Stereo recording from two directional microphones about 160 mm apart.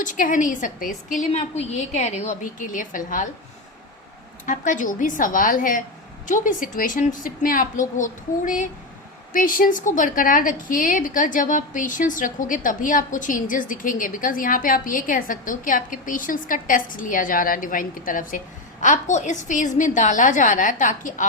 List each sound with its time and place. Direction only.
0.0 s a woman's voice: 55° left (ahead or behind)
4.4 s a woman's voice: 55° left (ahead or behind)